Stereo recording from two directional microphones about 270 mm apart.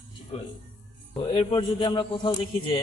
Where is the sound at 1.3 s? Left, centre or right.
Centre.